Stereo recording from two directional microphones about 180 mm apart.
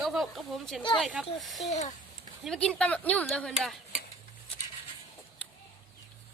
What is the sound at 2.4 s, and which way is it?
Speech, 5° left (ahead or behind).